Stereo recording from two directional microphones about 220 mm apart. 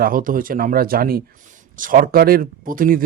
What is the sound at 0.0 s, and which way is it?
Speech, 40° right (ahead or behind).